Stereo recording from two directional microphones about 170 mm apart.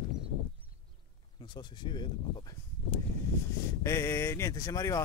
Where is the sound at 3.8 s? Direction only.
15° left (ahead or behind).